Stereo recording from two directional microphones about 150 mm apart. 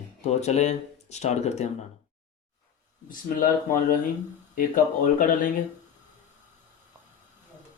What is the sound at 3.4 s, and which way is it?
Speech, 65° left (ahead or behind).